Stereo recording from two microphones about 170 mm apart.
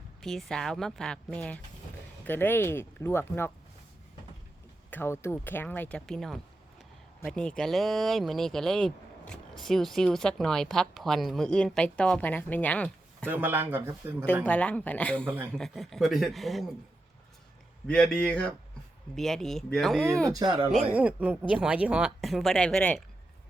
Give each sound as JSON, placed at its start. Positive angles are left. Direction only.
{"t": 0.2, "sound": "speech", "side_deg": 0}
{"t": 4.9, "sound": "speech", "side_deg": 15}
{"t": 13.2, "sound": "speech", "side_deg": -10}
{"t": 14.4, "sound": "speech", "side_deg": 5}
{"t": 17.8, "sound": "speech", "side_deg": 5}
{"t": 20.3, "sound": "speech", "side_deg": -25}
{"t": 20.9, "sound": "speech", "side_deg": -10}